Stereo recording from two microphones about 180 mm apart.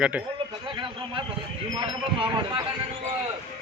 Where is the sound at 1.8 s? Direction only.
25° right (ahead or behind).